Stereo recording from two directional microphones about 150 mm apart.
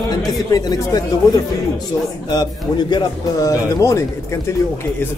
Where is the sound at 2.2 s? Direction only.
30° left (ahead or behind).